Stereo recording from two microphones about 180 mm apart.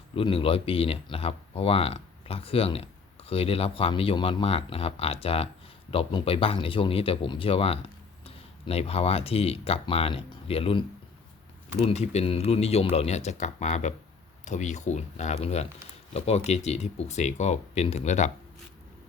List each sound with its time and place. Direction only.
0.2 s speech: 30° left (ahead or behind)